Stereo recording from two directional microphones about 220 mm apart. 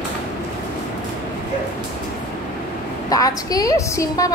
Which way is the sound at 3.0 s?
15° left (ahead or behind).